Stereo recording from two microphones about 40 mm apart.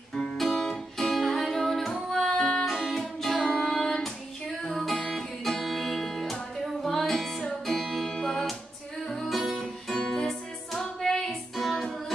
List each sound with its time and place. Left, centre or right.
0.1 s music: centre